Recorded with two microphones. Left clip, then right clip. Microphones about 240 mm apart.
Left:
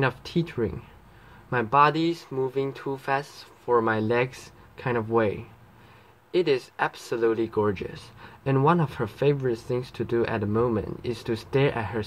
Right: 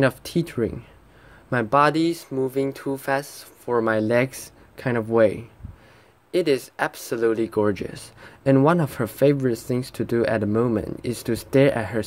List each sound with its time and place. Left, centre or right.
0.0 s speech: right